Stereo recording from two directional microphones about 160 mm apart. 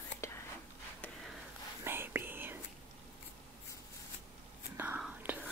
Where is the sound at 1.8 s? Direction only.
15° right (ahead or behind).